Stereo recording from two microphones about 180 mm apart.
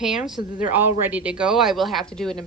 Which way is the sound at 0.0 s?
5° right (ahead or behind).